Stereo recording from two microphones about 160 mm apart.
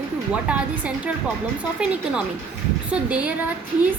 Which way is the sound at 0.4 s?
10° right (ahead or behind).